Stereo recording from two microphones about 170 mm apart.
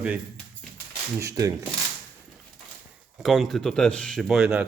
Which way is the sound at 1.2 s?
20° right (ahead or behind).